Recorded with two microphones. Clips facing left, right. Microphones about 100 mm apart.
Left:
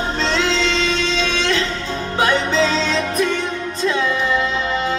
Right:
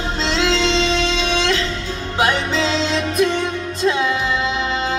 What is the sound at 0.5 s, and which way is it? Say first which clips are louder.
Music: right 2 dB; 20° right (ahead or behind).